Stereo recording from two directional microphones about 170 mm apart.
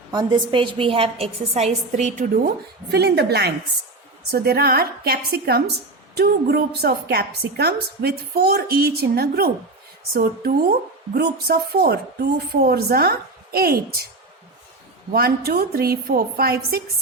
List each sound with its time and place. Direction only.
0.1 s a woman's voice: 25° right (ahead or behind); by 2.5 s 55° right (ahead or behind)
2.9 s a woman's voice: 75° right (ahead or behind)
15.1 s a woman's voice: 65° right (ahead or behind)